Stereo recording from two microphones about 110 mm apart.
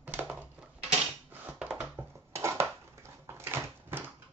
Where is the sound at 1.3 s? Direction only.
15° right (ahead or behind).